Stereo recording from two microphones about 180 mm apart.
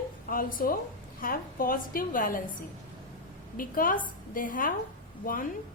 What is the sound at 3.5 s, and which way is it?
A woman's voice, 50° left (ahead or behind).